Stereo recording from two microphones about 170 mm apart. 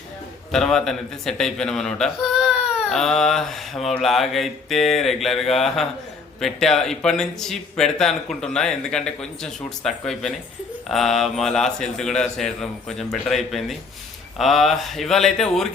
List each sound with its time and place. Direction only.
0.5 s speech: centre (ahead or behind)